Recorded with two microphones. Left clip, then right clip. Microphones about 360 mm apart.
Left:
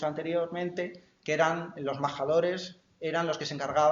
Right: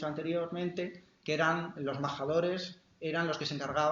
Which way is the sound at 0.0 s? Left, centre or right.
Centre.